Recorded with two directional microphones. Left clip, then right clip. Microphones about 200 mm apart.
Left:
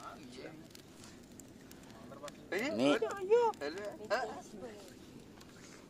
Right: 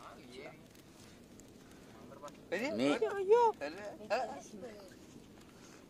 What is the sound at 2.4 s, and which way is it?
Speech, 30° right (ahead or behind).